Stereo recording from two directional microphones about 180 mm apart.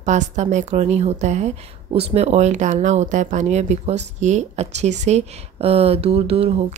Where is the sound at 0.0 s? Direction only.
40° right (ahead or behind).